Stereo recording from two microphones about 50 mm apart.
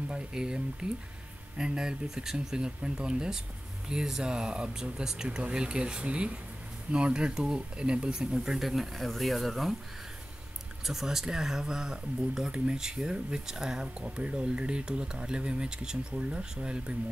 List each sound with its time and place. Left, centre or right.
0.1 s speech: centre
10.9 s speech: centre